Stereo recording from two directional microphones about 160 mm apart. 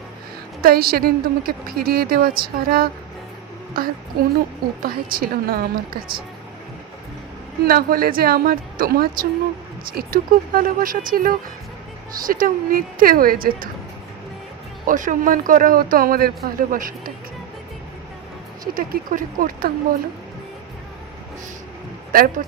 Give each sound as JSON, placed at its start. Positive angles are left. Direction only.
{"t": 0.6, "sound": "a woman's voice", "side_deg": -70}
{"t": 7.6, "sound": "a woman's voice", "side_deg": -70}
{"t": 14.8, "sound": "speech", "side_deg": -55}
{"t": 18.6, "sound": "speech", "side_deg": -60}
{"t": 22.1, "sound": "speech", "side_deg": -65}